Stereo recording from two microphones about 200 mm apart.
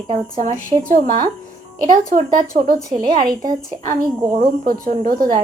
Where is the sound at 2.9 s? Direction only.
20° right (ahead or behind).